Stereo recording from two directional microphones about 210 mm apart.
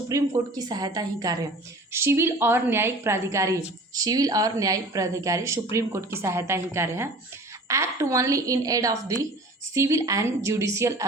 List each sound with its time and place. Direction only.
0.1 s a woman's voice: 15° right (ahead or behind)